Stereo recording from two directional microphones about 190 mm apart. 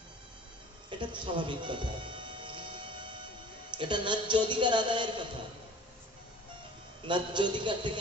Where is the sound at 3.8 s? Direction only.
25° right (ahead or behind).